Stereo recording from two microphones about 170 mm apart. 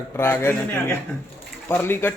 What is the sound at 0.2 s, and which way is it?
Speech, 15° left (ahead or behind).